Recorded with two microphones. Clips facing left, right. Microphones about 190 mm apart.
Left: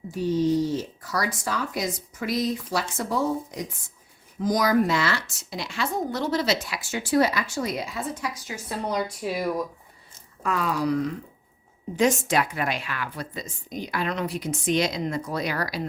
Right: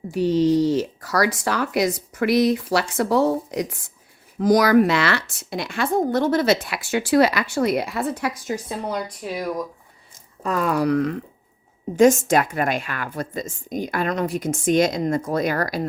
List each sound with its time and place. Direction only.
0.1 s speech: 75° right (ahead or behind); by 8.5 s 55° right (ahead or behind)
8.7 s speech: 10° right (ahead or behind)
9.2 s speech: 5° left (ahead or behind)
10.4 s speech: 40° right (ahead or behind)
10.7 s speech: 60° right (ahead or behind)
11.9 s a woman's voice: 45° right (ahead or behind)